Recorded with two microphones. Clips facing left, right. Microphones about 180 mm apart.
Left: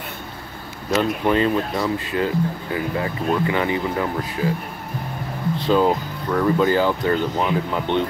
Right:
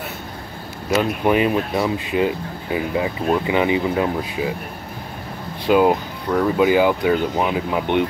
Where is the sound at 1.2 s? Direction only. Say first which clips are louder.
Right 1 dB; 15° right (ahead or behind).